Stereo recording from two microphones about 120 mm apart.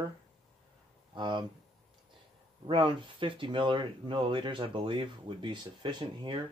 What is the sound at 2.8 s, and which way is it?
Speech, 45° right (ahead or behind).